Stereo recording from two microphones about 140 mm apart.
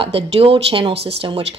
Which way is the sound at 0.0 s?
45° right (ahead or behind).